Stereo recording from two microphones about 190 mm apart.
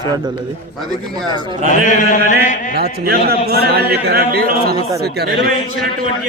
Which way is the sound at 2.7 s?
55° right (ahead or behind).